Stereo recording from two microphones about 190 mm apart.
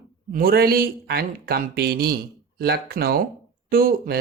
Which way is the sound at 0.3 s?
50° right (ahead or behind).